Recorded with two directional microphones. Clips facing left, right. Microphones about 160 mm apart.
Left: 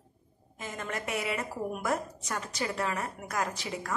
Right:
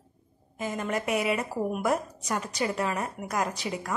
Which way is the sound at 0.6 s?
15° right (ahead or behind).